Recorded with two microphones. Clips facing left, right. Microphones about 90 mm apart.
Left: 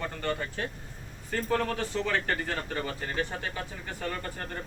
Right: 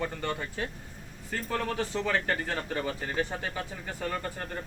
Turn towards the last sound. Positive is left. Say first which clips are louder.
# right 1 dB
turn(degrees=-10)  # may be behind; listen again after turning